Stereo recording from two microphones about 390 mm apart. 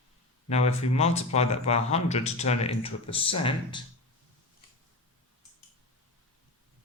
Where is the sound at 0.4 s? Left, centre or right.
Centre.